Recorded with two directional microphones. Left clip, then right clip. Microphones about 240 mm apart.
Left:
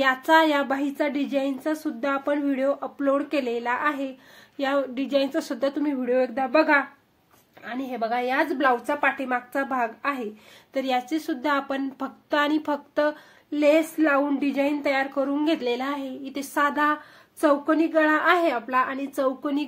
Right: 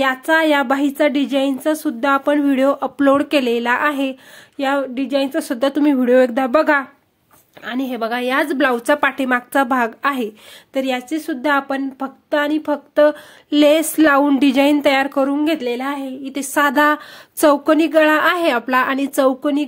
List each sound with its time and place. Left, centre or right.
0.0 s speech: right